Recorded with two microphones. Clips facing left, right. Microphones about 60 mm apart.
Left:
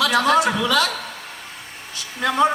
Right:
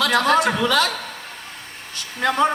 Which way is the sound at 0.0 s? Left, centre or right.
Right.